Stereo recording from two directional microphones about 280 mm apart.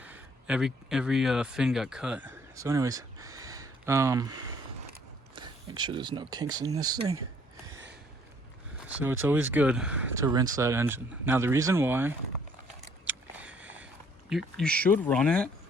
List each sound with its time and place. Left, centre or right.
0.0 s speech: centre
9.2 s speech: centre
13.1 s a sound: centre
14.3 s speech: centre